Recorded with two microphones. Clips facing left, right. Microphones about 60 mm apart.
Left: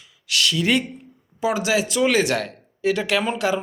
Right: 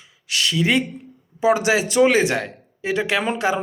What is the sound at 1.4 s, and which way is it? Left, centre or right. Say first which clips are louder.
Speech: right 4 dB; right.